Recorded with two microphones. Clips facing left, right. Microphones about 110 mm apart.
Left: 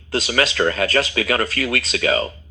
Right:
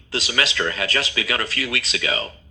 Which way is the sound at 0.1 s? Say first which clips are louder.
Left 4 dB; 40° left (ahead or behind).